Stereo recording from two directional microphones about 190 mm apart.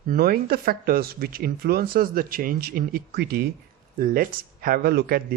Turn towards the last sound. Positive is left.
turn(degrees=-55)  # may be behind; listen again after turning